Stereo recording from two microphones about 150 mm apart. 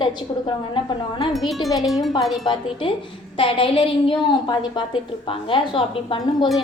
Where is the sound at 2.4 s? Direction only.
35° left (ahead or behind).